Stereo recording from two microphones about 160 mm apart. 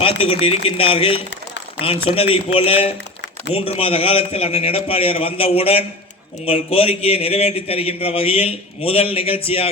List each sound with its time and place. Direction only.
0.0 s a man's voice: 35° left (ahead or behind)